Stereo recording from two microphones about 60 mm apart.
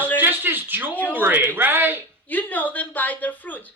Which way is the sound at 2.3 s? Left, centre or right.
Left.